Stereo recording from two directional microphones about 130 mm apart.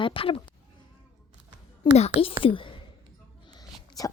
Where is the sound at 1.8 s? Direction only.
35° left (ahead or behind).